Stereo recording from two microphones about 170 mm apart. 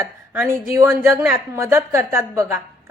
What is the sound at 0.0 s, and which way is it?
A woman's voice, 15° right (ahead or behind).